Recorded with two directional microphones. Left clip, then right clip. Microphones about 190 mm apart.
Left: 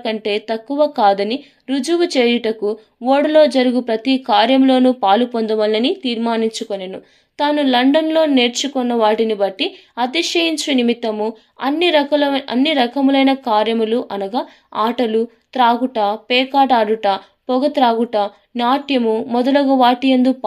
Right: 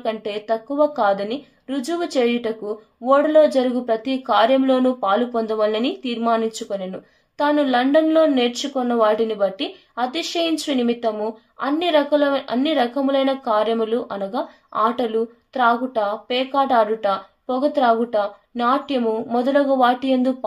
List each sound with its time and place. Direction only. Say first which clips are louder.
0.0 s a woman's voice: left 5 dB; 30° left (ahead or behind)